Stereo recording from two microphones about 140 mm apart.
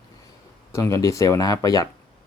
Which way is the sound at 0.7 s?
20° left (ahead or behind).